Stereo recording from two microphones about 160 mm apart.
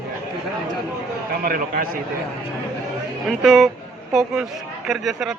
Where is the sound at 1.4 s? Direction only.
60° right (ahead or behind).